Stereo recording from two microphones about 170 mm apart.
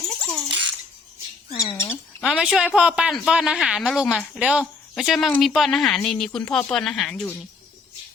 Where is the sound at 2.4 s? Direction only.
5° right (ahead or behind).